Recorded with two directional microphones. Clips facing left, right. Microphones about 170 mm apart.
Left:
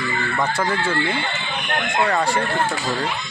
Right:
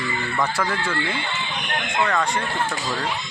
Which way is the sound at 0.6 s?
20° left (ahead or behind).